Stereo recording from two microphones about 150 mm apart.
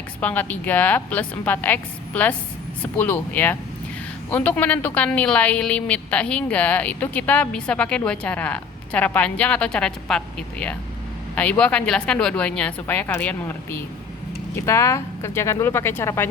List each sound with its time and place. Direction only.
0.2 s speech: 10° left (ahead or behind)